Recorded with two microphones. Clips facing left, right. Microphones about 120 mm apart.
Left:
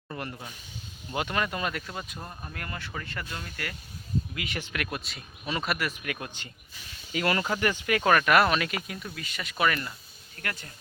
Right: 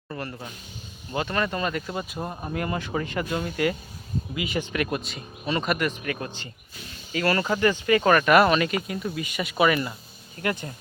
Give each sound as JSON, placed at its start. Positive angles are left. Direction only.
{"t": 0.1, "sound": "speech", "side_deg": 15}
{"t": 2.1, "sound": "speech", "side_deg": -30}
{"t": 4.4, "sound": "speech", "side_deg": -5}
{"t": 7.2, "sound": "speech", "side_deg": 15}
{"t": 7.4, "sound": "speech", "side_deg": 0}